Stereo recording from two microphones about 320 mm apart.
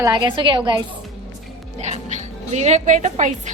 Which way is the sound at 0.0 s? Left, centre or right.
Centre.